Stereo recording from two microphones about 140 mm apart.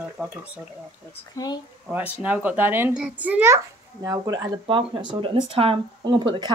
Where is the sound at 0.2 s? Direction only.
10° right (ahead or behind).